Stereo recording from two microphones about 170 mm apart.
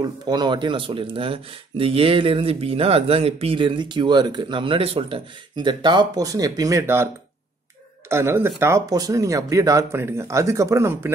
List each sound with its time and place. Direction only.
0.0 s speech: 25° right (ahead or behind)
8.1 s speech: 15° right (ahead or behind)